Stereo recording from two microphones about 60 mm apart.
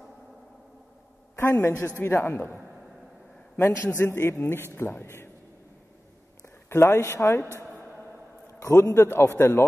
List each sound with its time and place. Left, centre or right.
1.5 s a man's voice: left
3.6 s a man's voice: left
6.8 s a man's voice: left
7.4 s a sound: right
8.5 s a man's voice: left